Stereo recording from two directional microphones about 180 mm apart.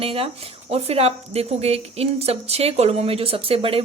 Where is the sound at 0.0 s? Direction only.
30° right (ahead or behind).